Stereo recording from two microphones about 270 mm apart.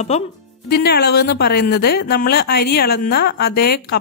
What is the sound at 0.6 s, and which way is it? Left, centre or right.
Speech, left.